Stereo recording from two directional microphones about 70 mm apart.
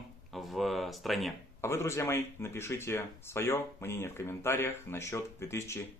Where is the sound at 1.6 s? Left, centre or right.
Left.